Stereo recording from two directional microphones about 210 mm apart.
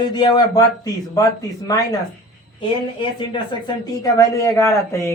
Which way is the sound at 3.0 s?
20° left (ahead or behind).